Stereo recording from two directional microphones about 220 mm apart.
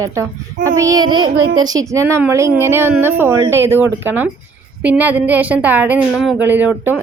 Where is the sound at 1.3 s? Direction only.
60° right (ahead or behind).